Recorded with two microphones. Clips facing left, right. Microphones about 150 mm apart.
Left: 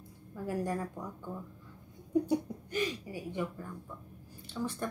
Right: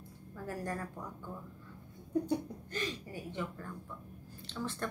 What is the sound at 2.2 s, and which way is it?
Speech, 15° left (ahead or behind).